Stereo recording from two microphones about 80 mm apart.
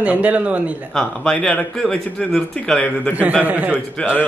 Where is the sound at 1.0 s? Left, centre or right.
Centre.